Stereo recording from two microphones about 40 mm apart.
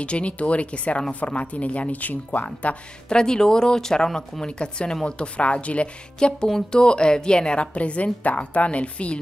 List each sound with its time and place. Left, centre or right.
0.0 s a woman's voice: left
3.1 s a woman's voice: centre
6.1 s music: left
6.7 s a woman's voice: left